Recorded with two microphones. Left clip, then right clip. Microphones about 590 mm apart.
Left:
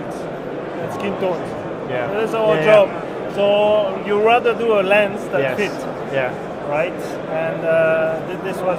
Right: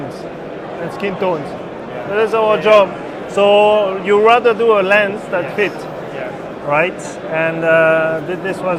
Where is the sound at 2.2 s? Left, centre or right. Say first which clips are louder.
Right 5 dB; right.